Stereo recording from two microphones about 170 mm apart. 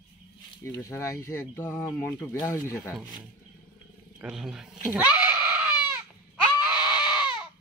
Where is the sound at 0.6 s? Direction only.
15° left (ahead or behind).